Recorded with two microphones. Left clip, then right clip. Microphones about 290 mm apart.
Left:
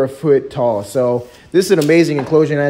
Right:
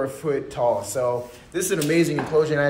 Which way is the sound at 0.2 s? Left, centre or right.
Left.